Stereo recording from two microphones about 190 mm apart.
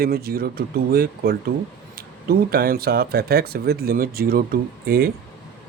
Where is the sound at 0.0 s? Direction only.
55° right (ahead or behind).